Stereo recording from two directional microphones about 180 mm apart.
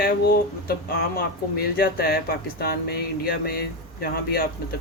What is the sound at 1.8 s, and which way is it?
Speech, 60° left (ahead or behind).